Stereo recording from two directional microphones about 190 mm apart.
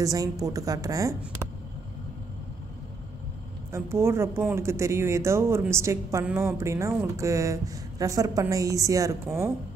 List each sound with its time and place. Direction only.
0.0 s speech: 20° right (ahead or behind)
3.7 s speech: 15° right (ahead or behind)